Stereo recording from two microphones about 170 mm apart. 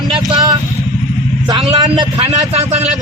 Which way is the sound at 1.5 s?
30° right (ahead or behind).